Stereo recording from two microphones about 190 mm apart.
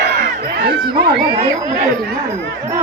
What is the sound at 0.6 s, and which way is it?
Speech, 60° right (ahead or behind).